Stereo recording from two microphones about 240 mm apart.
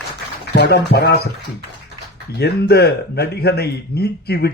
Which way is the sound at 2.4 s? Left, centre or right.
Left.